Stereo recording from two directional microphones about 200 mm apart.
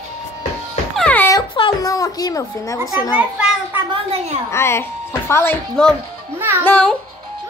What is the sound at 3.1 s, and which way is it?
Speech, 5° right (ahead or behind).